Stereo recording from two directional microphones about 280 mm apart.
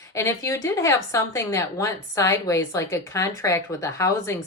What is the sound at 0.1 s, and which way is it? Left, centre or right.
A woman's voice, centre.